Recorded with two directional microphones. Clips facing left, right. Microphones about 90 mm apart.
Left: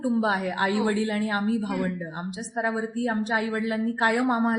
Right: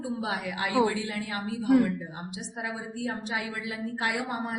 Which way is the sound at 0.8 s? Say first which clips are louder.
Left 4 dB; 40° left (ahead or behind).